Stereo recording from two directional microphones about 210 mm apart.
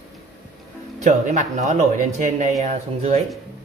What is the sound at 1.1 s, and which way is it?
Speech, 35° right (ahead or behind).